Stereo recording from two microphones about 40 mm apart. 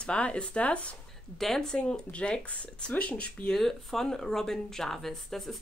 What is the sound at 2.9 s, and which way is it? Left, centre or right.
Speech, left.